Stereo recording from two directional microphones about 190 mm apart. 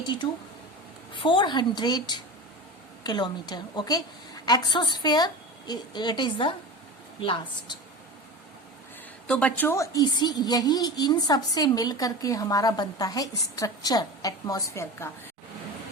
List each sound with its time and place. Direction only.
0.0 s a woman's voice: 25° left (ahead or behind)
9.2 s a woman's voice: 5° left (ahead or behind)